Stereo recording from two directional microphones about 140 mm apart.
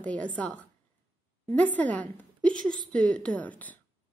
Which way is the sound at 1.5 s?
10° left (ahead or behind).